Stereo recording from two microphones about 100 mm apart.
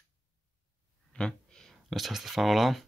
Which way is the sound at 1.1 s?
10° left (ahead or behind).